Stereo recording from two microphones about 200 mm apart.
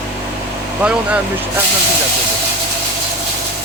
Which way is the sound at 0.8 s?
10° right (ahead or behind).